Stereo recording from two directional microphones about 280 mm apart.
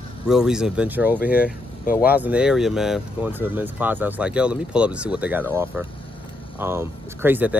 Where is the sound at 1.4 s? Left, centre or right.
Left.